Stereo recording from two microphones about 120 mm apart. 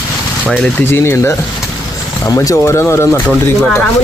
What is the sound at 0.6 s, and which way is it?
Speech, 15° left (ahead or behind).